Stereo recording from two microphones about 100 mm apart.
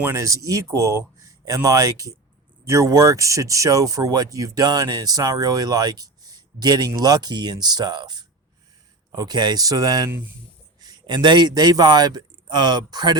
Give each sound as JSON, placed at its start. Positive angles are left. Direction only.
{"t": 0.1, "sound": "a man's voice", "side_deg": -35}